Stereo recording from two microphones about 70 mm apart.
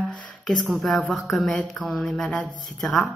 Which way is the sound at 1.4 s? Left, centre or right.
Centre.